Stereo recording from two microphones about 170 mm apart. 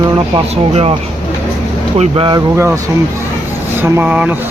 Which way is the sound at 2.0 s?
30° right (ahead or behind).